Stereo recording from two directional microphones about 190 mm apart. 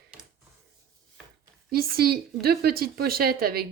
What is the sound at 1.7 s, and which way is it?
Speech, 55° right (ahead or behind).